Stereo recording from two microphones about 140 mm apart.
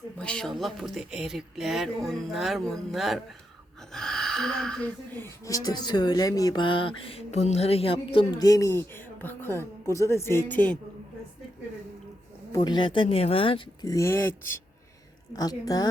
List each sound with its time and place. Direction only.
0.2 s speech: 5° left (ahead or behind)
5.5 s speech: 25° left (ahead or behind)
8.4 s a woman's voice: 25° left (ahead or behind)
12.5 s speech: 30° left (ahead or behind)
13.8 s a woman's voice: 20° left (ahead or behind)
15.3 s a woman's voice: 25° left (ahead or behind)